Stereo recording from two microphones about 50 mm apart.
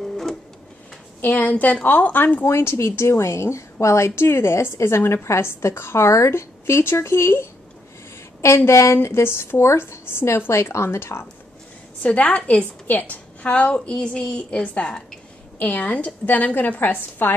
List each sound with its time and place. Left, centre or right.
0.0 s printer: centre
1.2 s a woman's voice: left
2.4 s a woman's voice: left
6.6 s a woman's voice: left
8.4 s a woman's voice: left
12.0 s a woman's voice: left